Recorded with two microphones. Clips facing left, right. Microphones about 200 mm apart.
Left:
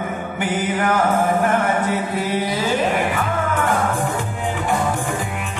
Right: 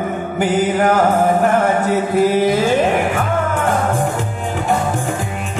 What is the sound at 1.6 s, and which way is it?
Music, 45° right (ahead or behind).